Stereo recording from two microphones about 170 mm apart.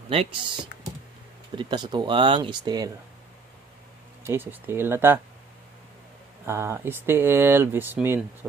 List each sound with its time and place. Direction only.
0.1 s speech: 35° right (ahead or behind)
1.5 s speech: 30° right (ahead or behind)
4.2 s speech: 15° right (ahead or behind)
6.4 s speech: 15° right (ahead or behind)